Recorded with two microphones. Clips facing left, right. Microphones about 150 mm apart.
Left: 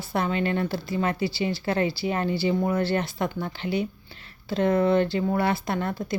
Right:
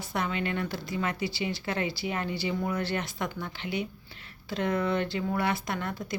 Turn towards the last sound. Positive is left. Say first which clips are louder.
# left 5 dB
turn(degrees=30)  # may be behind; listen again after turning